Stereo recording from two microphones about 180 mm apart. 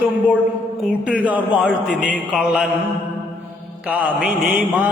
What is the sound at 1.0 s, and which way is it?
Mantra, 5° right (ahead or behind).